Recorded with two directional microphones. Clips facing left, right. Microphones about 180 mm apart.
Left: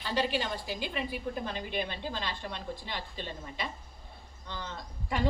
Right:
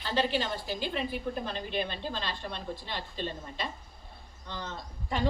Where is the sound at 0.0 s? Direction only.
15° left (ahead or behind).